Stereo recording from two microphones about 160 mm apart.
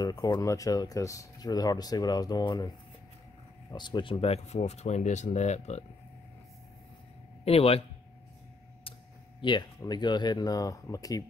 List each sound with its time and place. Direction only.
0.0 s speech: 25° left (ahead or behind)
3.7 s speech: 30° left (ahead or behind); by 5.9 s 45° left (ahead or behind)
7.4 s speech: 40° left (ahead or behind)
9.4 s speech: 30° left (ahead or behind)